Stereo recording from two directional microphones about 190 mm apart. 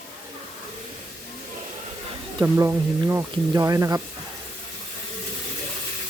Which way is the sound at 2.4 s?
15° right (ahead or behind).